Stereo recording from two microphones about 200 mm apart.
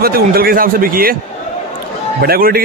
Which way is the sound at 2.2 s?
50° right (ahead or behind).